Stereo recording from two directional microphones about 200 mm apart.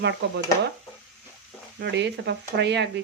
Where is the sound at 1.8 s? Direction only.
60° right (ahead or behind).